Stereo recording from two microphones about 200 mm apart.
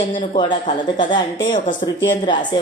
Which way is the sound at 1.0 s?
20° left (ahead or behind).